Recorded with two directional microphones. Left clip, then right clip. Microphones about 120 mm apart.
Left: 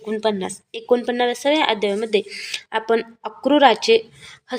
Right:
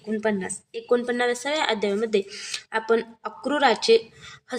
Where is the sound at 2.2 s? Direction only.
35° left (ahead or behind).